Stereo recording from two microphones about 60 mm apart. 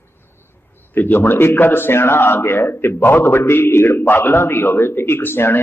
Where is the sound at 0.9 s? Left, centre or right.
Left.